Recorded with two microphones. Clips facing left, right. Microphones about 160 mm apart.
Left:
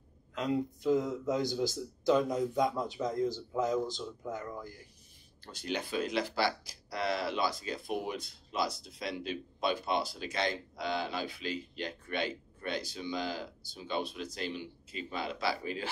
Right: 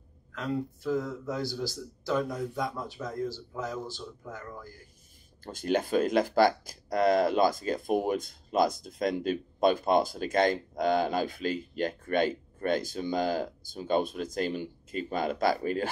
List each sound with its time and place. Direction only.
0.3 s speech: 20° left (ahead or behind)
5.4 s speech: 50° right (ahead or behind)